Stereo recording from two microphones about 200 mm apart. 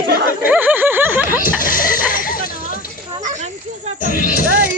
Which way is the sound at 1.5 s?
45° left (ahead or behind).